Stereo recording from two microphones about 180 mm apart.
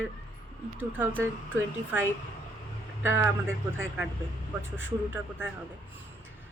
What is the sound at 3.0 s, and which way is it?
Speech, 15° right (ahead or behind).